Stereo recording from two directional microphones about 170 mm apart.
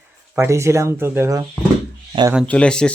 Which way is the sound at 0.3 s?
15° right (ahead or behind).